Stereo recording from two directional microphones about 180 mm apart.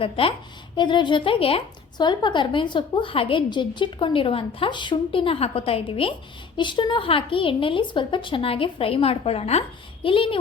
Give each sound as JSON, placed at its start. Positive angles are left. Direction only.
{"t": 0.0, "sound": "speech", "side_deg": 30}